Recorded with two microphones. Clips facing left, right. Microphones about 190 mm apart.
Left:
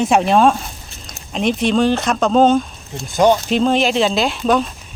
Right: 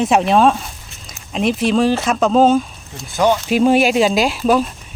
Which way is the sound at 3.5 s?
10° right (ahead or behind).